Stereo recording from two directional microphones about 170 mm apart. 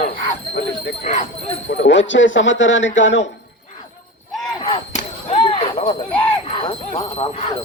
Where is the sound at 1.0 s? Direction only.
40° left (ahead or behind).